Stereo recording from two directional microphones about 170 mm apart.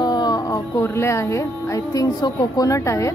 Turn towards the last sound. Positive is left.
turn(degrees=15)  # may be behind; listen again after turning